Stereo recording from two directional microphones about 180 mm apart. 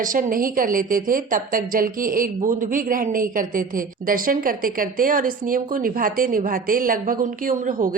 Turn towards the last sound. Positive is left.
turn(degrees=-45)  # may be behind; listen again after turning